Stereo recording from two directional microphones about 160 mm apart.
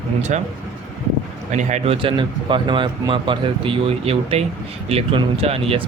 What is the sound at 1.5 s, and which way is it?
Speech, 50° right (ahead or behind).